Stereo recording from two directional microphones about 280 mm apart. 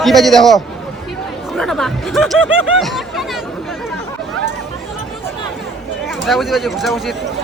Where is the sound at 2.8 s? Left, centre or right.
Centre.